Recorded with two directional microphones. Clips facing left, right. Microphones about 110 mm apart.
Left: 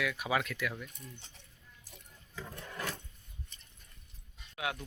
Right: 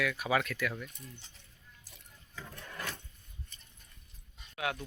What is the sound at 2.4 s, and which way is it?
Wood, 20° left (ahead or behind).